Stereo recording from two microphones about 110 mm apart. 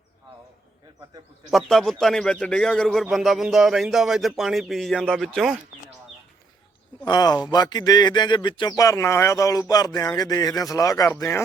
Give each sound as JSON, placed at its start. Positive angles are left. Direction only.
{"t": 1.5, "sound": "a man's voice", "side_deg": 0}
{"t": 7.0, "sound": "speech", "side_deg": 40}
{"t": 8.7, "sound": "speech", "side_deg": 30}